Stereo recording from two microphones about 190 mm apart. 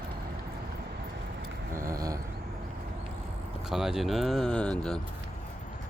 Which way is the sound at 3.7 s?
Centre (ahead or behind).